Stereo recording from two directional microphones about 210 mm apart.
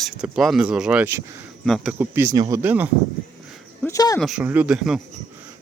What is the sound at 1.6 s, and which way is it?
Speech, centre (ahead or behind).